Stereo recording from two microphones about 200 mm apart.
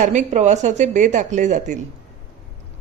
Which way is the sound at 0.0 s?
35° right (ahead or behind).